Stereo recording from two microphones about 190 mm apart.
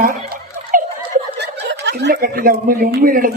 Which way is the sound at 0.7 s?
45° right (ahead or behind).